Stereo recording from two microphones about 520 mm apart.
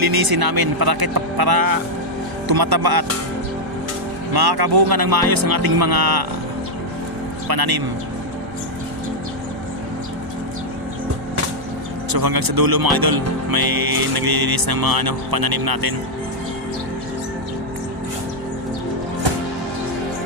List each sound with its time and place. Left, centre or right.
0.0 s speech: right
4.4 s speech: right
7.4 s speech: right
12.1 s speech: right